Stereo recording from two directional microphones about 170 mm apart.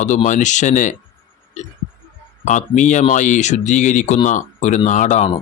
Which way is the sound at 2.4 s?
45° left (ahead or behind).